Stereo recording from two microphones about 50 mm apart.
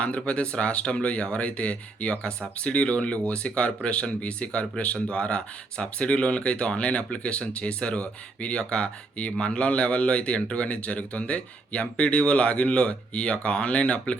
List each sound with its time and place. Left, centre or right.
0.0 s speech: left